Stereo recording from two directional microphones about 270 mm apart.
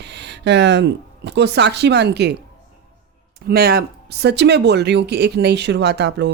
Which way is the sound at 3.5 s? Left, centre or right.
Right.